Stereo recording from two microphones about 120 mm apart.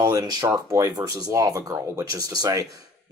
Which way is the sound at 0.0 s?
30° right (ahead or behind).